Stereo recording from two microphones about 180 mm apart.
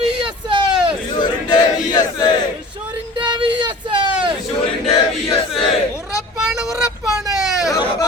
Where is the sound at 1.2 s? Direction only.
20° left (ahead or behind).